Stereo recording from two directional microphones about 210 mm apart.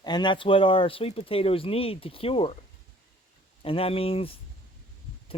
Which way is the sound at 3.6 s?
25° left (ahead or behind).